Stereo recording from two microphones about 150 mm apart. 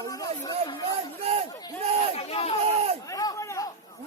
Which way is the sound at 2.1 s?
40° left (ahead or behind).